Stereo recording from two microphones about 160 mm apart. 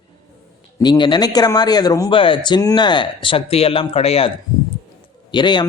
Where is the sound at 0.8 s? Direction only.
30° left (ahead or behind).